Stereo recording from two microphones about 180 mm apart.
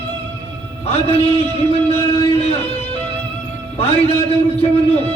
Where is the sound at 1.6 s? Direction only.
35° left (ahead or behind).